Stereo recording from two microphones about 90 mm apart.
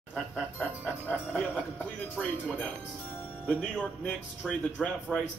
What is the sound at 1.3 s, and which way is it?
A man's voice, 15° left (ahead or behind).